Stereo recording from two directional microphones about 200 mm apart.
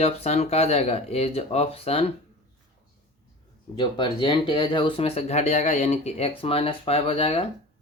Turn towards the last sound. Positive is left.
turn(degrees=30)  # may be behind; listen again after turning